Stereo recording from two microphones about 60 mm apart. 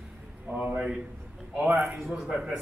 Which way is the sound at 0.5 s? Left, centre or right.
Right.